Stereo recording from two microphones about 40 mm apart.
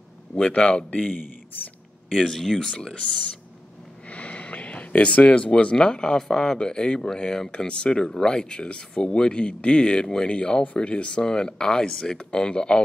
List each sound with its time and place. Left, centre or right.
0.6 s a man's voice: left
2.1 s speech: centre
2.7 s speech: left
4.1 s speech: left; by 7.5 s centre
7.5 s speech: left